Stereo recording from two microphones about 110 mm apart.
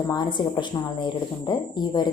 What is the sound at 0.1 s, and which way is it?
A woman's voice, 40° left (ahead or behind).